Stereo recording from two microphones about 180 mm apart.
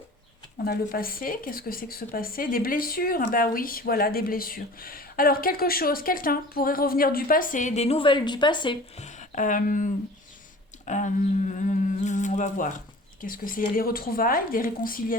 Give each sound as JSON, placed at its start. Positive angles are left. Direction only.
{"t": 0.6, "sound": "speech", "side_deg": 55}
{"t": 9.0, "sound": "speech", "side_deg": 40}
{"t": 10.8, "sound": "humming", "side_deg": 45}
{"t": 13.2, "sound": "speech", "side_deg": 50}